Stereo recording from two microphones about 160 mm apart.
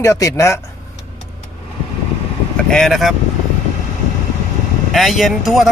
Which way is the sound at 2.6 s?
5° left (ahead or behind).